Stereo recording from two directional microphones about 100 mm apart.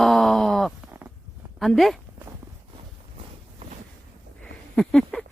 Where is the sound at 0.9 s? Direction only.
20° right (ahead or behind).